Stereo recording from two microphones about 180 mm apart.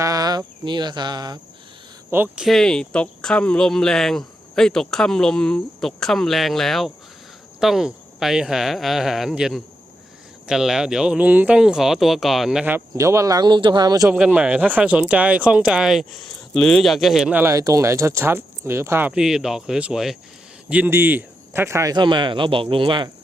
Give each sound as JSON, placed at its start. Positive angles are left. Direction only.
{"t": 0.0, "sound": "cricket", "side_deg": -20}
{"t": 2.0, "sound": "speech", "side_deg": -10}
{"t": 14.1, "sound": "speech", "side_deg": -10}